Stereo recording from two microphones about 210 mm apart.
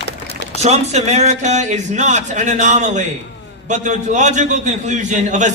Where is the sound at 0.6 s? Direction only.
30° right (ahead or behind).